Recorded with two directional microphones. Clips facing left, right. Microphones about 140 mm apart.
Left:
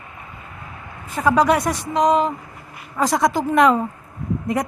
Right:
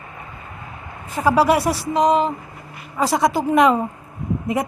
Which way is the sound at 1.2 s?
5° right (ahead or behind).